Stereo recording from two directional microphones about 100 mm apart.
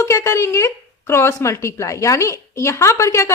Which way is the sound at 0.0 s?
30° left (ahead or behind).